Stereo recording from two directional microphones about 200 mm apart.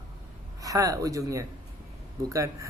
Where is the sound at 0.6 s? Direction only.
15° right (ahead or behind).